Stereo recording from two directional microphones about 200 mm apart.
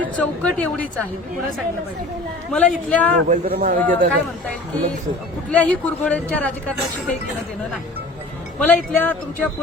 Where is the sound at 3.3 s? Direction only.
50° right (ahead or behind).